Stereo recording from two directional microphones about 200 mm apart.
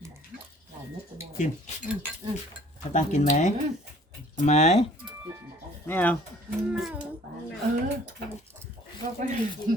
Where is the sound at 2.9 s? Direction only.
35° left (ahead or behind).